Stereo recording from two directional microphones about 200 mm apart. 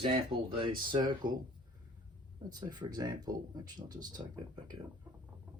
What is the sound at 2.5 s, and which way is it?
Speech, 20° right (ahead or behind).